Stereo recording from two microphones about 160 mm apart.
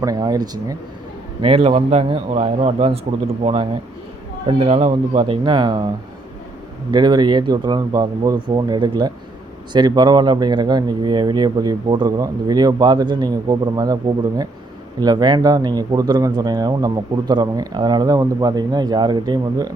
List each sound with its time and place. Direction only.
0.0 s speech: 20° right (ahead or behind)
1.4 s a man's voice: 35° right (ahead or behind)
6.9 s speech: 25° right (ahead or behind)